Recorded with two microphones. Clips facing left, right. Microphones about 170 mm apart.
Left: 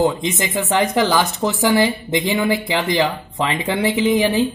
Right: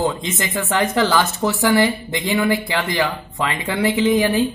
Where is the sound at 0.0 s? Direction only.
20° left (ahead or behind).